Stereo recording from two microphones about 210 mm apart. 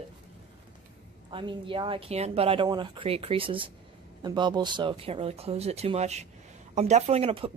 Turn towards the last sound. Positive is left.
turn(degrees=-25)  # may be behind; listen again after turning